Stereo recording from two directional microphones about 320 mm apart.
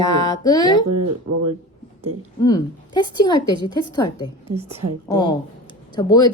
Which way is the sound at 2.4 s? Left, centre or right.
Centre.